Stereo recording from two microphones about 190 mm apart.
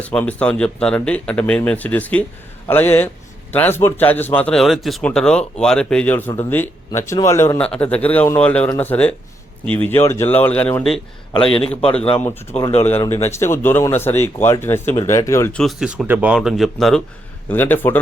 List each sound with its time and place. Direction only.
0.0 s speech: 10° left (ahead or behind)
11.5 s a man's voice: 30° left (ahead or behind)
12.9 s speech: 15° left (ahead or behind)